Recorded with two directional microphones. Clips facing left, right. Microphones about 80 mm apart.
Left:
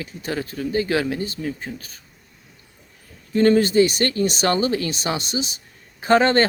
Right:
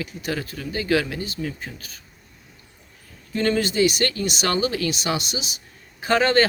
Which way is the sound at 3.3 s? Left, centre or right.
Left.